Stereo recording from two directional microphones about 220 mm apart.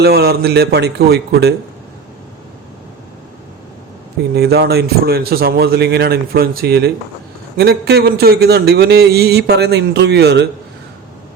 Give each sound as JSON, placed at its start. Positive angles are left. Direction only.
{"t": 0.0, "sound": "a man's voice", "side_deg": -45}
{"t": 4.4, "sound": "a man's voice", "side_deg": -45}